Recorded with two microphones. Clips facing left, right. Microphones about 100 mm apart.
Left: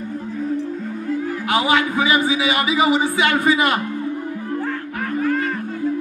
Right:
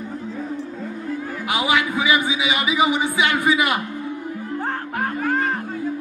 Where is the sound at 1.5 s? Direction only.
15° right (ahead or behind).